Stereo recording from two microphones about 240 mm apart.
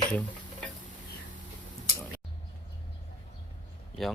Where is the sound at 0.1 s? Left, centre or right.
Centre.